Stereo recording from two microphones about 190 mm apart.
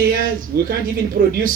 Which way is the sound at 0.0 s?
45° right (ahead or behind).